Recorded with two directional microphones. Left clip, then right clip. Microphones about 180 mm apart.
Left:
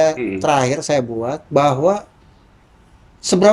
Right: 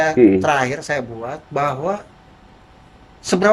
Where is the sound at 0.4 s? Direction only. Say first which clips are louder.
Left 2 dB; 20° left (ahead or behind).